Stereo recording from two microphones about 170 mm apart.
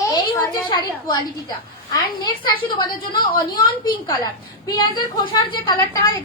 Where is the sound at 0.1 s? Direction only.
20° left (ahead or behind).